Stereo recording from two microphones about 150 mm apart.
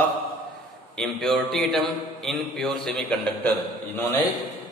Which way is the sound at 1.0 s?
Centre (ahead or behind).